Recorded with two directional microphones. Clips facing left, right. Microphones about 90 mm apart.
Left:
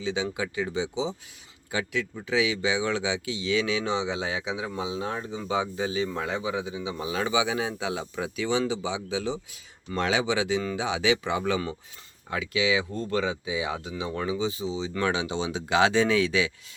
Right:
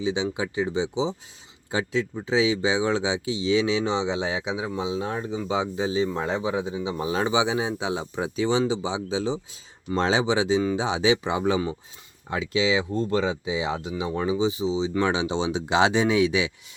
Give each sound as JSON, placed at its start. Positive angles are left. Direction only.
{"t": 0.0, "sound": "speech", "side_deg": -20}